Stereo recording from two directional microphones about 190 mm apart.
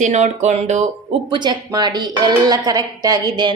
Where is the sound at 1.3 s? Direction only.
20° right (ahead or behind).